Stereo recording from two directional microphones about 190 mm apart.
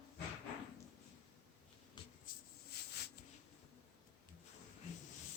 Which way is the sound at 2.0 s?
25° left (ahead or behind).